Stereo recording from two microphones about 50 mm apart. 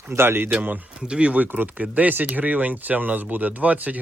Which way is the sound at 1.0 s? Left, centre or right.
Centre.